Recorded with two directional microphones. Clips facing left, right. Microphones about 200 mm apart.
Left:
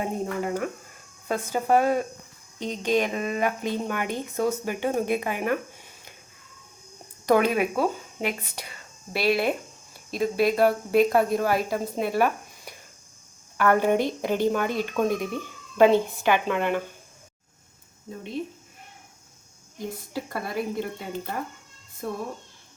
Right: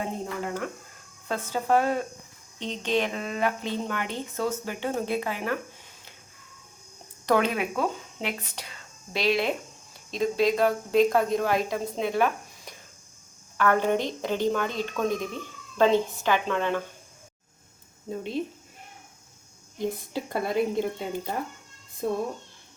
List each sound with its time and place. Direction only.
0.0 s speech: 10° left (ahead or behind)
7.3 s speech: 10° left (ahead or behind)
20.1 s speech: 20° right (ahead or behind)